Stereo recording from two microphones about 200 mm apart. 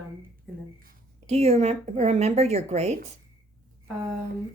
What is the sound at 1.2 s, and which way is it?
Speech, 35° right (ahead or behind).